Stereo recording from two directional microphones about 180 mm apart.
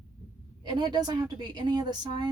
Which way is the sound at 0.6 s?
25° right (ahead or behind).